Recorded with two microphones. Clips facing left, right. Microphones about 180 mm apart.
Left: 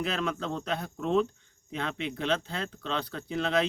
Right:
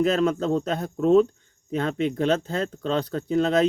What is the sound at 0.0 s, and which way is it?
Speech, 40° right (ahead or behind).